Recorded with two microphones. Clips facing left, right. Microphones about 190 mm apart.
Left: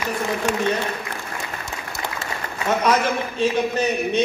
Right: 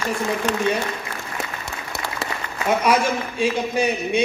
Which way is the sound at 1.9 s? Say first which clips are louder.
Right 1 dB; 65° right (ahead or behind).